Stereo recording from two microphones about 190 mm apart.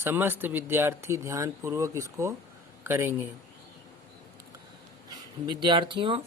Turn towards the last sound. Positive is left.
turn(degrees=-25)  # may be behind; listen again after turning